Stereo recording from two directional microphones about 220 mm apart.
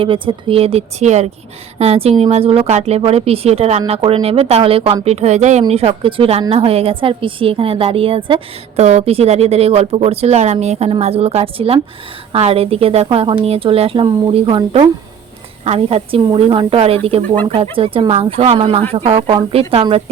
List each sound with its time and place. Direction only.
0.0 s a woman's voice: 25° right (ahead or behind)